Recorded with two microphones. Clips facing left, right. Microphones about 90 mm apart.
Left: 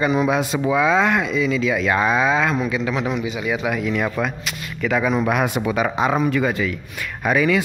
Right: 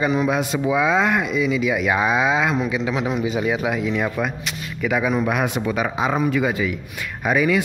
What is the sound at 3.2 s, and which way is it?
Speech, 35° right (ahead or behind).